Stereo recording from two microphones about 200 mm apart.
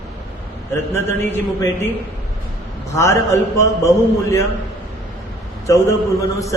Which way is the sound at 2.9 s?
15° left (ahead or behind).